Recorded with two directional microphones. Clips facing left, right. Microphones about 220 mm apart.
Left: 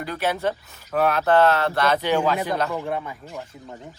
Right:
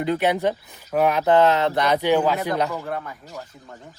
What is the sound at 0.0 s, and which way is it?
Speech, 20° right (ahead or behind).